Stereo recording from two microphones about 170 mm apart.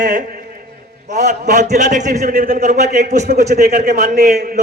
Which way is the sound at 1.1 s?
55° right (ahead or behind).